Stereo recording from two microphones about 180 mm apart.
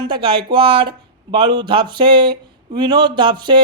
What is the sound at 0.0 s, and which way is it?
Speech, 25° right (ahead or behind).